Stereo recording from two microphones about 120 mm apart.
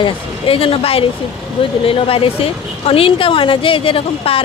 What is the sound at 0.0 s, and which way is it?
A woman's voice, 50° left (ahead or behind).